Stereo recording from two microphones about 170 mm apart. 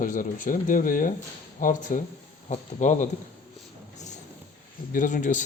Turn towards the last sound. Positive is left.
turn(degrees=45)  # may be behind; listen again after turning